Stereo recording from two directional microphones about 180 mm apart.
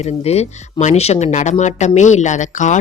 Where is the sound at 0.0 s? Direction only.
35° left (ahead or behind).